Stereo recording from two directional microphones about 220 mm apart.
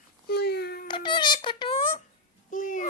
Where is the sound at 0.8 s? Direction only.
20° left (ahead or behind).